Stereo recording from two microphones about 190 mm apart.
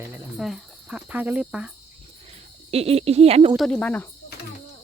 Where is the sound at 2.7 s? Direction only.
30° right (ahead or behind).